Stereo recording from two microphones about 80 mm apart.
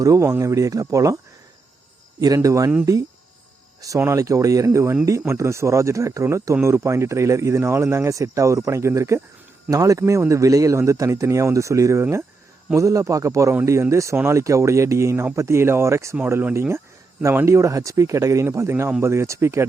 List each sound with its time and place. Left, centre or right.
0.0 s speech: right
2.2 s speech: right
3.8 s speech: right
9.6 s speech: right